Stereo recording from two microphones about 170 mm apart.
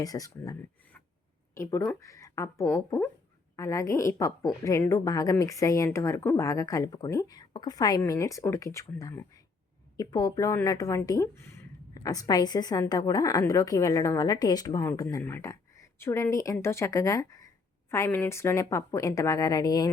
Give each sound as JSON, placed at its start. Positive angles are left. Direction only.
{"t": 0.0, "sound": "a woman's voice", "side_deg": 20}
{"t": 1.5, "sound": "a woman's voice", "side_deg": 15}